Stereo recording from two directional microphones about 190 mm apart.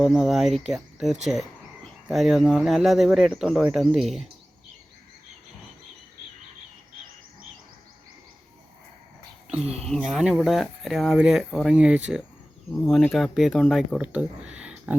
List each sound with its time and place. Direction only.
0.0 s speech: centre (ahead or behind)
9.6 s speech: 35° right (ahead or behind)
9.9 s speech: 5° right (ahead or behind)